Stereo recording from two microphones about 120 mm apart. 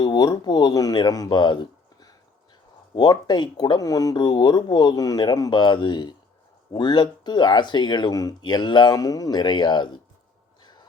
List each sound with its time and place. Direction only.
0.0 s speech: 35° left (ahead or behind)